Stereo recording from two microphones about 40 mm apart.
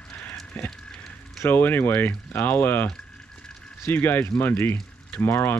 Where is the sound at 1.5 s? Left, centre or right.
Left.